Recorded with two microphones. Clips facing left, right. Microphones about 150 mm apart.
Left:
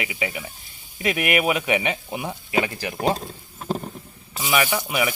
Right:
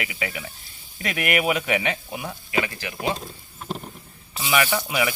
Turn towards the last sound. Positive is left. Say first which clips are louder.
# even
turn(degrees=15)  # may be behind; listen again after turning